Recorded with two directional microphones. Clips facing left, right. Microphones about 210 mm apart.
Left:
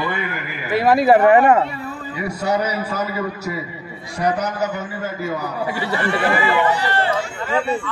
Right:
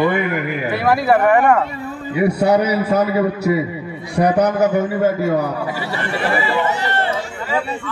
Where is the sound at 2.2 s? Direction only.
60° right (ahead or behind).